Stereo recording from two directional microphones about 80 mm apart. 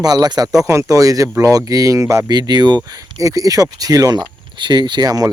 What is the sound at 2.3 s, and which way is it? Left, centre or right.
Speech, right.